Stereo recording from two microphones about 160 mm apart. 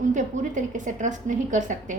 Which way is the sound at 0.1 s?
50° right (ahead or behind).